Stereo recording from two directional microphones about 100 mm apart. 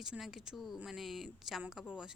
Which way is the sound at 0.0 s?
5° right (ahead or behind).